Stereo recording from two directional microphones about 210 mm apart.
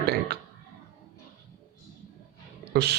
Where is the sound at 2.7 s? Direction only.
50° right (ahead or behind).